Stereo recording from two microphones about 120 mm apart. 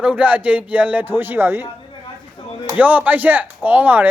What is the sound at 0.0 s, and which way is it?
Speech, 10° right (ahead or behind).